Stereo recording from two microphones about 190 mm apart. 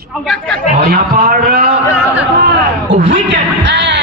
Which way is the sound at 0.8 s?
55° right (ahead or behind).